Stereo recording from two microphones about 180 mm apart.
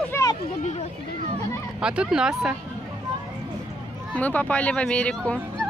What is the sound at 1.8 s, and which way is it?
Speech, 5° right (ahead or behind).